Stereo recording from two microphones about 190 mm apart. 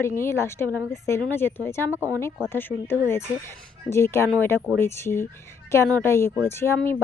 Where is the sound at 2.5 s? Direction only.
10° left (ahead or behind).